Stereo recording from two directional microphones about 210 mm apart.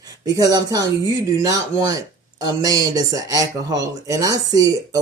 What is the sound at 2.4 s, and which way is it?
Speech, 15° right (ahead or behind).